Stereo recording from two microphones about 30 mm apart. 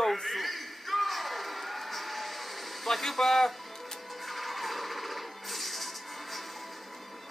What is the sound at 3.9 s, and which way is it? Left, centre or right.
Music, centre.